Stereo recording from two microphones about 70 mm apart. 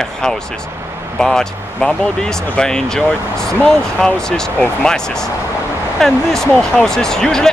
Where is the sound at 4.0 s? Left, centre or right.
Centre.